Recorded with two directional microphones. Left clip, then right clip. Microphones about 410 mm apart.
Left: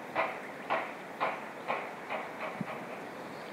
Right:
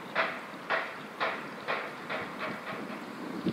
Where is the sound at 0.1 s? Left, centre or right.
Right.